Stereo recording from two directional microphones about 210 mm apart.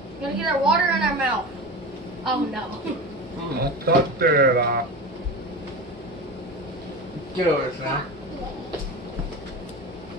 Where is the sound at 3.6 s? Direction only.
45° right (ahead or behind).